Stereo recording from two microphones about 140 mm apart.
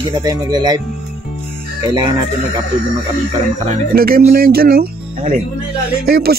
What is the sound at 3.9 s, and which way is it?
Speech, 90° right.